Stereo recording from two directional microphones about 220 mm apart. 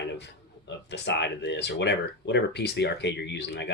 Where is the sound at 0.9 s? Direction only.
50° left (ahead or behind).